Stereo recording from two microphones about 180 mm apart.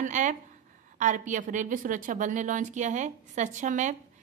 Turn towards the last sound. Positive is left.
turn(degrees=-40)  # may be behind; listen again after turning